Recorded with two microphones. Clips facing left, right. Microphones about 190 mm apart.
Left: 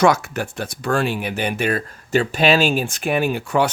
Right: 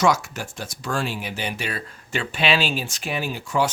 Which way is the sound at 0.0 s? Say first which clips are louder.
Left 4 dB; 60° left (ahead or behind).